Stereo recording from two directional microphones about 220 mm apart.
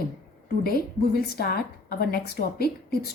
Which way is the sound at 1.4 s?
45° left (ahead or behind).